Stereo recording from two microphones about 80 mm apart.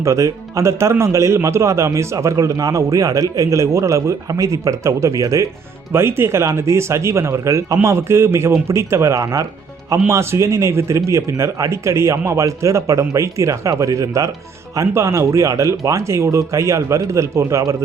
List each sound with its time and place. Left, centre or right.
0.0 s speech: right
5.9 s speech: right